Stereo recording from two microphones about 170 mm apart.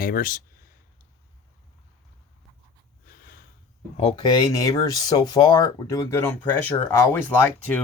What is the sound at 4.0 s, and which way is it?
Speech, 30° left (ahead or behind).